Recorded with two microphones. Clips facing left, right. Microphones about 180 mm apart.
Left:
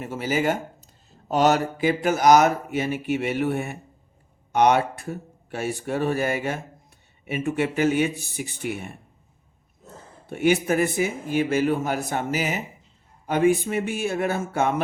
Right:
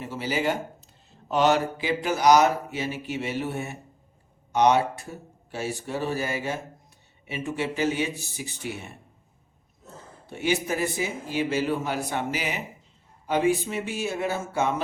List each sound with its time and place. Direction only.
0.0 s speech: 50° left (ahead or behind)
10.2 s speech: 55° left (ahead or behind)